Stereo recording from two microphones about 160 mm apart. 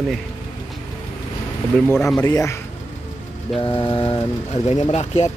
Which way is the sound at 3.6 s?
30° left (ahead or behind).